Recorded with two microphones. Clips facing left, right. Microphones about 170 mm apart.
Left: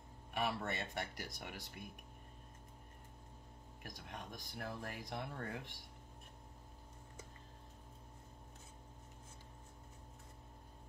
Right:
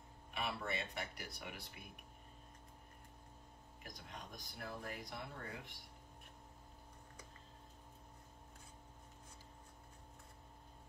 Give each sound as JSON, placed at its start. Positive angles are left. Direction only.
{"t": 0.3, "sound": "speech", "side_deg": 45}
{"t": 4.1, "sound": "speech", "side_deg": 55}